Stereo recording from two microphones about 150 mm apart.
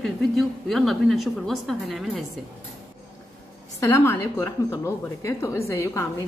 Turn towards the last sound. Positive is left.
turn(degrees=20)  # may be behind; listen again after turning